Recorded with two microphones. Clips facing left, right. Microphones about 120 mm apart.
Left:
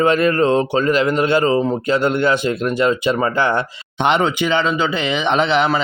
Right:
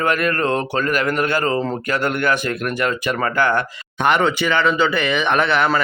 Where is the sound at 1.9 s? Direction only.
25° left (ahead or behind).